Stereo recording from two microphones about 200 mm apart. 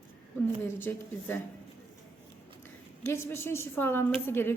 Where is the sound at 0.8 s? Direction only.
10° left (ahead or behind).